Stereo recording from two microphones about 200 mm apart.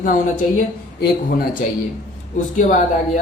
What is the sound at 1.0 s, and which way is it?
Speech, 50° left (ahead or behind).